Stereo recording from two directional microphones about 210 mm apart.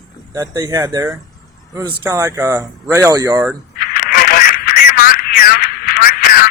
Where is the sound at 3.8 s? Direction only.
45° left (ahead or behind).